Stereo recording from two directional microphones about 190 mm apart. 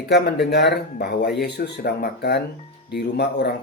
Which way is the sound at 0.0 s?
60° left (ahead or behind).